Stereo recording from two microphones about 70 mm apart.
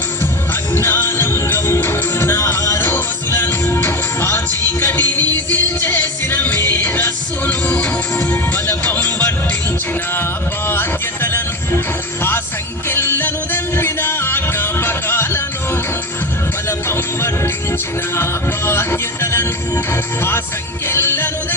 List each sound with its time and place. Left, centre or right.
0.7 s music: left
10.7 s music: left
12.9 s music: left